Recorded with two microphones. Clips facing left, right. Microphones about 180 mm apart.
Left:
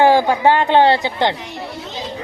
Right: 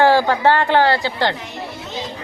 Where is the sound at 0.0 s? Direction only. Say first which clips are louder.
Left 1 dB; 15° left (ahead or behind).